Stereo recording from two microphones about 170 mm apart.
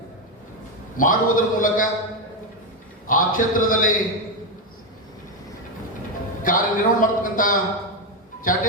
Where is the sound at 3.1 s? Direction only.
55° left (ahead or behind).